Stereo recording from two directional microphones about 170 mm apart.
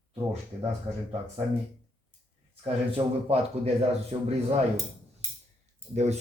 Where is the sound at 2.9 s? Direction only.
35° right (ahead or behind).